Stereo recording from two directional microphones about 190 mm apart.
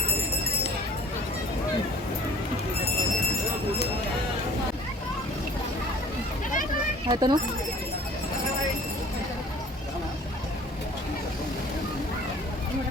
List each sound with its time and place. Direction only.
7.1 s speech: 20° right (ahead or behind)